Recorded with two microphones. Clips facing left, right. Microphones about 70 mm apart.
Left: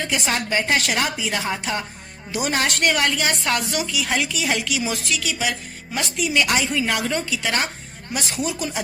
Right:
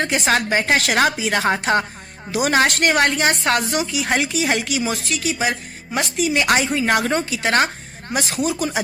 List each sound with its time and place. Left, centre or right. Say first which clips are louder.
0.0 s a woman's voice: right 5 dB; right
0.8 s a woman's voice: right 5 dB; right
6.6 s a woman's voice: right 2 dB; right
6.8 s speech: right 5 dB; right